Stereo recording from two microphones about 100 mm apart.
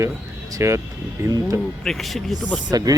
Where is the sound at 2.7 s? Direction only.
40° right (ahead or behind).